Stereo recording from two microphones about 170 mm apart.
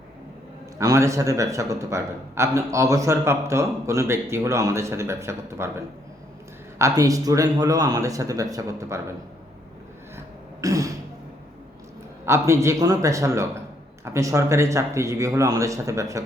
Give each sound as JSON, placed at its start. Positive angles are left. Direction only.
{"t": 0.8, "sound": "a man's voice", "side_deg": -20}
{"t": 10.6, "sound": "throat clearing", "side_deg": -20}
{"t": 12.2, "sound": "a man's voice", "side_deg": -15}